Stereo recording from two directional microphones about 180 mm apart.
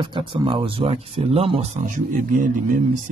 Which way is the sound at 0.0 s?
25° right (ahead or behind).